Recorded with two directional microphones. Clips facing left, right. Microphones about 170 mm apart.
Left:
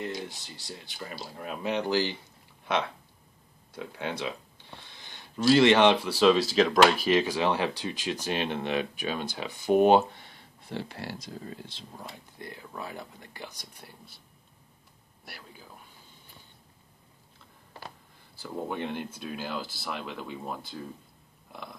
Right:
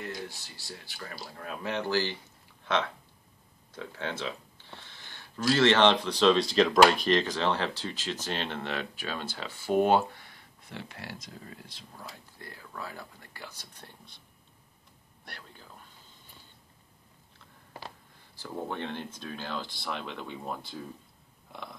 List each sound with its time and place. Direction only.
0.0 s speech: 20° left (ahead or behind)
3.7 s a sound: 15° left (ahead or behind)
5.4 s speech: 15° left (ahead or behind)
15.2 s speech: 5° left (ahead or behind)
18.4 s speech: 10° left (ahead or behind)
21.5 s a sound: centre (ahead or behind)